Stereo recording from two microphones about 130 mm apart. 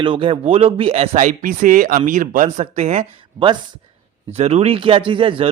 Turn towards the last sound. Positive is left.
turn(degrees=-40)  # may be behind; listen again after turning